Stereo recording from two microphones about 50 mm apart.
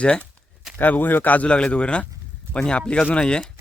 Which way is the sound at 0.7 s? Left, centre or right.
Left.